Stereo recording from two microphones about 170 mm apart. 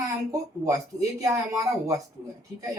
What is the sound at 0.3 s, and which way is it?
Speech, 20° right (ahead or behind).